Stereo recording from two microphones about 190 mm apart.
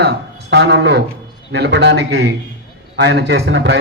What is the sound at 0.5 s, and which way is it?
A man's voice, 65° right (ahead or behind).